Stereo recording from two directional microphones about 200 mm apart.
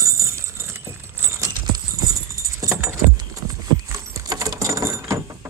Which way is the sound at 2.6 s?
15° right (ahead or behind).